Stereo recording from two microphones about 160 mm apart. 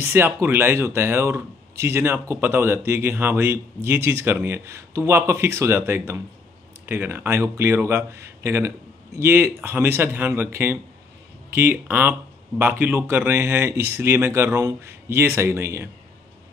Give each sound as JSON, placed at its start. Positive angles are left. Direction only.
{"t": 0.0, "sound": "speech", "side_deg": -15}